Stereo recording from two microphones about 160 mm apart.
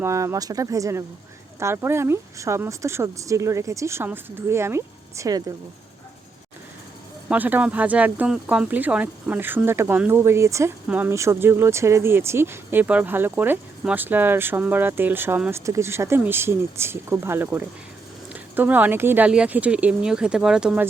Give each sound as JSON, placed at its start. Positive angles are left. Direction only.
{"t": 0.0, "sound": "speech", "side_deg": -15}
{"t": 7.3, "sound": "speech", "side_deg": -10}